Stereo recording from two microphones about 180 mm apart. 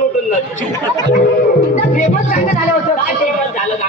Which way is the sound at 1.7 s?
45° left (ahead or behind).